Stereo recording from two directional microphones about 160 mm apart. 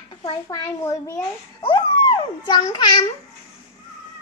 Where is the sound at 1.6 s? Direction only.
30° left (ahead or behind).